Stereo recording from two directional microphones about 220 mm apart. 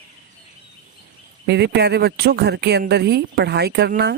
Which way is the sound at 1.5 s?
50° right (ahead or behind).